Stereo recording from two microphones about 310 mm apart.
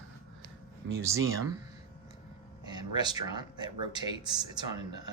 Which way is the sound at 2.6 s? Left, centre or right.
Centre.